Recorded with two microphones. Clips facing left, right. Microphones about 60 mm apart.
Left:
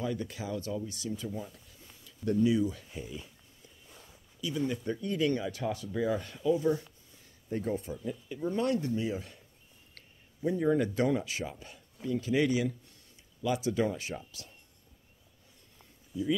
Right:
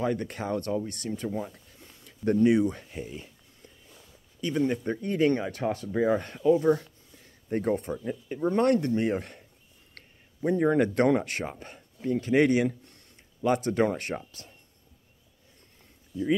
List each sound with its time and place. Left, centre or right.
0.0 s speech: right
16.1 s speech: centre